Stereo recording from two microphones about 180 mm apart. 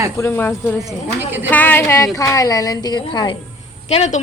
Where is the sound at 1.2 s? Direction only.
10° right (ahead or behind).